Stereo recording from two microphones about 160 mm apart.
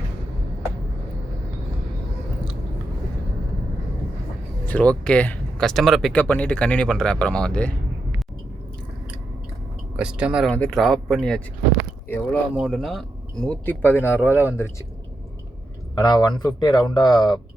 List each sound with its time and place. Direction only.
4.6 s speech: 10° left (ahead or behind)
10.0 s speech: 5° right (ahead or behind)
10.5 s speech: 5° left (ahead or behind)
12.5 s speech: centre (ahead or behind)
13.5 s speech: 10° left (ahead or behind)
16.0 s speech: 25° left (ahead or behind)